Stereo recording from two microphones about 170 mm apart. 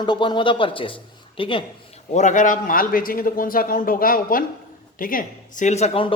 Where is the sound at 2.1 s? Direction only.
45° left (ahead or behind).